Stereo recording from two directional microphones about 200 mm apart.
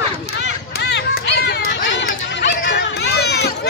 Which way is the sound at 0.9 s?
55° left (ahead or behind).